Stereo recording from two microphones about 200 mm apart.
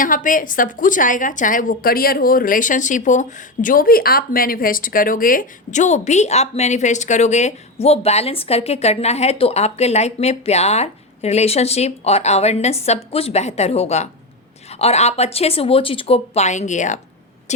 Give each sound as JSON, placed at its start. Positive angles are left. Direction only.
{"t": 0.0, "sound": "a woman's voice", "side_deg": 40}